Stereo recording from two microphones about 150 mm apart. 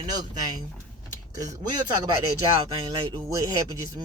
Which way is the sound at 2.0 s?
30° right (ahead or behind).